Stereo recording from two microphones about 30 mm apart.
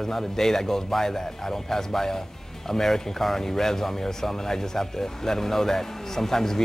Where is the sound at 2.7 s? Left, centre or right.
Centre.